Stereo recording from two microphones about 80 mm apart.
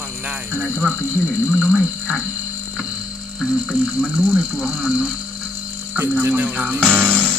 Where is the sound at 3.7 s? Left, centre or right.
Centre.